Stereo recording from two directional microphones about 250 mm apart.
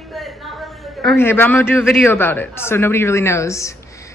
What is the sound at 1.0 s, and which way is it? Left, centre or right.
Speech, centre.